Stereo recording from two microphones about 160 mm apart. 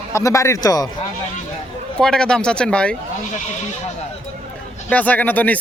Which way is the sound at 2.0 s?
5° left (ahead or behind).